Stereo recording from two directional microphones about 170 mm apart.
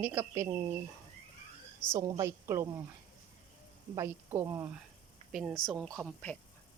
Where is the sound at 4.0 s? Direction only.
15° right (ahead or behind).